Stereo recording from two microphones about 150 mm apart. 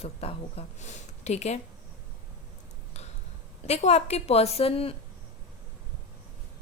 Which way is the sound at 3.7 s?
45° left (ahead or behind).